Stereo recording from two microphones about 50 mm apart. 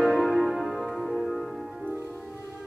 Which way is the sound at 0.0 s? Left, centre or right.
Centre.